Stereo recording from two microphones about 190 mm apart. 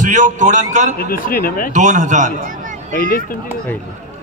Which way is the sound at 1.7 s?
40° right (ahead or behind).